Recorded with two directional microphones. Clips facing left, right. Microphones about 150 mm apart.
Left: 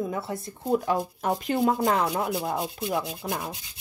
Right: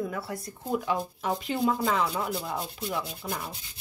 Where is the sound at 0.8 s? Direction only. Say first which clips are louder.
Left 3 dB; 45° left (ahead or behind).